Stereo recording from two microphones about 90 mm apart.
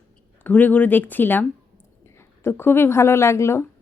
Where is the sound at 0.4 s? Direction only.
20° left (ahead or behind).